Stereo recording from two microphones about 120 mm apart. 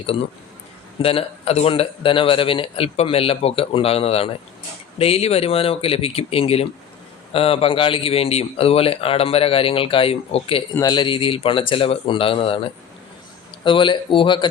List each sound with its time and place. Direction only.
0.9 s speech: 55° left (ahead or behind)
10.8 s speech: 35° left (ahead or behind)